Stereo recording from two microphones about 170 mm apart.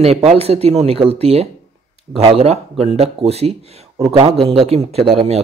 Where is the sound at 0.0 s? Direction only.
40° right (ahead or behind).